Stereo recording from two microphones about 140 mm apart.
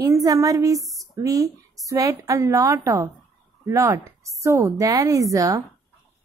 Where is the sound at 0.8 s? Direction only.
Centre (ahead or behind).